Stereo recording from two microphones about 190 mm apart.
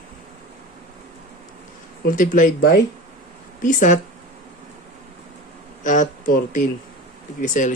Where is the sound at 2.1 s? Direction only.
45° left (ahead or behind).